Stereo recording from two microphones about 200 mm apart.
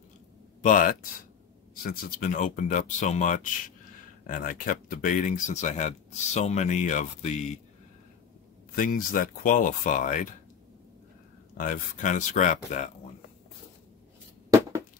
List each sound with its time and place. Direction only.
0.6 s speech: 40° left (ahead or behind)
8.7 s speech: 40° left (ahead or behind)
11.5 s speech: 40° left (ahead or behind)